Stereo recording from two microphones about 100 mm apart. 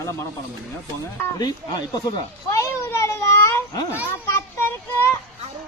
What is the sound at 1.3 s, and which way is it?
Speech, 40° left (ahead or behind).